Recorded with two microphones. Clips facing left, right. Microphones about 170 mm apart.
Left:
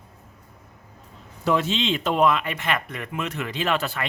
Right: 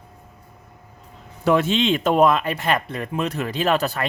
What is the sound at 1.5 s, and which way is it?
Speech, 55° right (ahead or behind).